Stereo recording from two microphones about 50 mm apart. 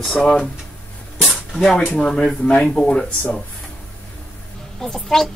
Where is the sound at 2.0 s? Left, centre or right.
Centre.